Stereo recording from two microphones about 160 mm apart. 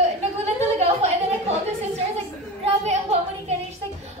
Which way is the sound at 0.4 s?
40° right (ahead or behind).